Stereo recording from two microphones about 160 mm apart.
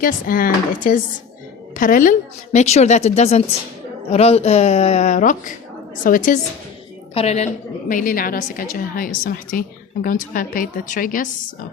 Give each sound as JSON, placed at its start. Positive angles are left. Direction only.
{"t": 0.0, "sound": "a woman's voice", "side_deg": 60}
{"t": 7.1, "sound": "a woman's voice", "side_deg": 40}